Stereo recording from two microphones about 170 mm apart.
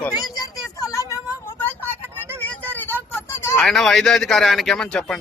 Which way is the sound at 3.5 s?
Centre (ahead or behind).